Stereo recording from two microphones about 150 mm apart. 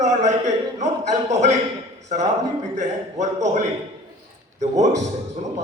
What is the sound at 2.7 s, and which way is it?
Speech, 50° right (ahead or behind).